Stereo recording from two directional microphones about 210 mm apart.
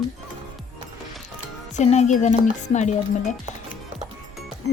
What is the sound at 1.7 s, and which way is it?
Speech, 30° left (ahead or behind).